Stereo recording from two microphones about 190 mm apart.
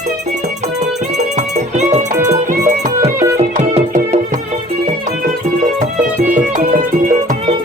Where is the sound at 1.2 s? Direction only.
35° right (ahead or behind).